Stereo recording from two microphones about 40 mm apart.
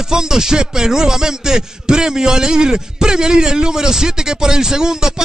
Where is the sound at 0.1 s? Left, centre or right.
Centre.